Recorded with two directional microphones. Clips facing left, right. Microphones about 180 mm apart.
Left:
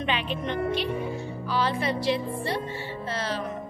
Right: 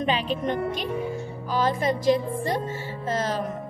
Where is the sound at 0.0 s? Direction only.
40° right (ahead or behind).